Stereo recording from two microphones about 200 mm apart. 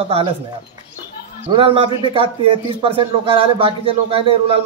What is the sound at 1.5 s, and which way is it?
Speech, 25° right (ahead or behind).